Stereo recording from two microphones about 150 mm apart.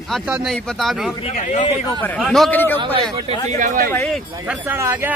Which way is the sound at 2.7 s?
35° right (ahead or behind).